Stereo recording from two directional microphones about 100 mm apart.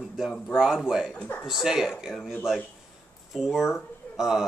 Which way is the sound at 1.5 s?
5° right (ahead or behind).